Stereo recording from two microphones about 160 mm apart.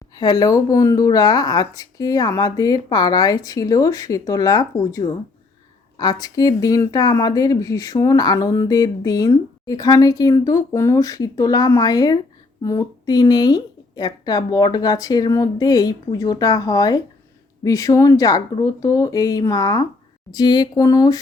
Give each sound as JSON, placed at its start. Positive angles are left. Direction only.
{"t": 0.2, "sound": "speech", "side_deg": 25}